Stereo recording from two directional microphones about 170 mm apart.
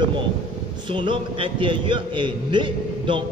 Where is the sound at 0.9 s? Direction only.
30° right (ahead or behind).